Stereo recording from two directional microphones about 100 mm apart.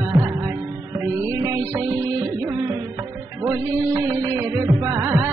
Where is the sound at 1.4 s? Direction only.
30° right (ahead or behind).